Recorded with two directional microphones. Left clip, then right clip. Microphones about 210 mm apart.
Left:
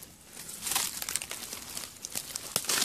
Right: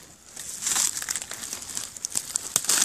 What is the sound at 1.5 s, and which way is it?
Crumpling, 40° right (ahead or behind).